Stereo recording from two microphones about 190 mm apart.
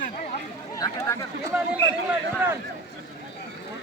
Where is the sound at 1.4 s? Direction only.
10° right (ahead or behind).